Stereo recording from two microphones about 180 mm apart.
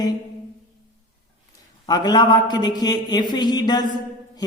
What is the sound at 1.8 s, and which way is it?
A woman's voice, 25° left (ahead or behind).